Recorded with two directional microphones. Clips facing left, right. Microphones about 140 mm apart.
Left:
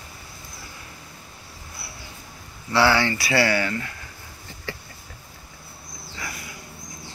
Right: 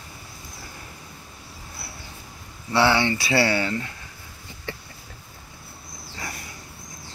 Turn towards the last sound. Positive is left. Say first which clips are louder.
# even
turn(degrees=-40)  # may be behind; listen again after turning